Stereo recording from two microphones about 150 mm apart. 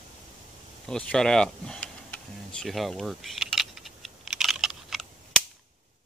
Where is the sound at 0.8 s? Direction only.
5° left (ahead or behind).